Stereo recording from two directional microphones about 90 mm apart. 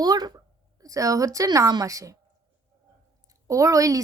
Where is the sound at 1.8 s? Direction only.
40° right (ahead or behind).